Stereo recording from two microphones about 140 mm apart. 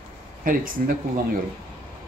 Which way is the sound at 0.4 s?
80° right.